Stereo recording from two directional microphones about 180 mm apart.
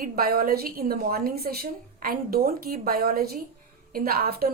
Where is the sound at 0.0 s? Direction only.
55° right (ahead or behind).